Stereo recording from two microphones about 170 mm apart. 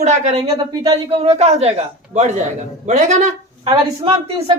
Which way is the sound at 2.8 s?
45° right (ahead or behind).